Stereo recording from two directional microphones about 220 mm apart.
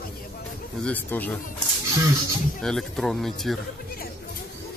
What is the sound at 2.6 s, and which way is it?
Speech, centre (ahead or behind).